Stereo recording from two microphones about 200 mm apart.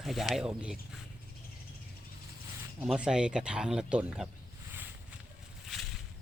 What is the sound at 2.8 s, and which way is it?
Speech, 5° right (ahead or behind).